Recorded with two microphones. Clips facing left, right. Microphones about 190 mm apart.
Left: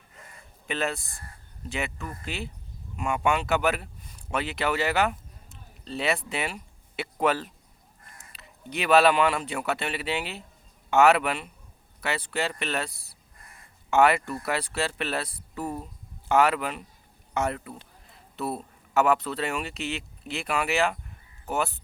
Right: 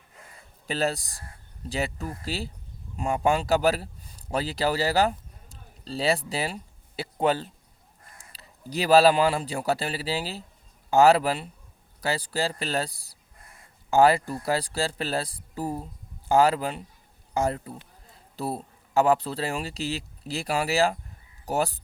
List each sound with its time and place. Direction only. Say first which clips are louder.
0.7 s a man's voice: right 3 dB; 35° right (ahead or behind)